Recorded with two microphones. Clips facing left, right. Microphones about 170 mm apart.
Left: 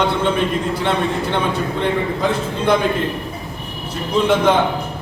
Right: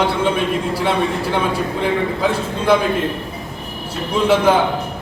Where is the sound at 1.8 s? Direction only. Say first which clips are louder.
Right 1 dB; 5° right (ahead or behind).